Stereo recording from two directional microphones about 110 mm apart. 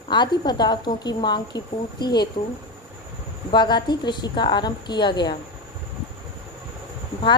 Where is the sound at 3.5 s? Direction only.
45° left (ahead or behind).